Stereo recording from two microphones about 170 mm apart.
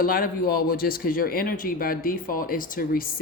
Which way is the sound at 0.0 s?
55° left (ahead or behind).